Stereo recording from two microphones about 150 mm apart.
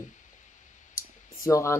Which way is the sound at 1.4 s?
20° left (ahead or behind).